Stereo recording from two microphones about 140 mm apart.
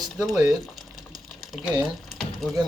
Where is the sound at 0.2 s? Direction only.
Centre (ahead or behind).